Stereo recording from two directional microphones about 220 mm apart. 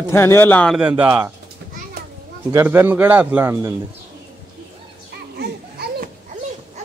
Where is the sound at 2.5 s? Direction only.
10° right (ahead or behind).